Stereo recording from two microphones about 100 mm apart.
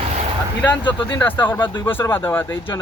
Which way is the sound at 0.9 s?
20° left (ahead or behind).